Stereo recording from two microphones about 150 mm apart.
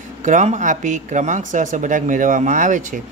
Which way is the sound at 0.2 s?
55° right (ahead or behind).